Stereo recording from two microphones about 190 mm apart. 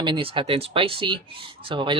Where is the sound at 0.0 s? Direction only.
25° right (ahead or behind).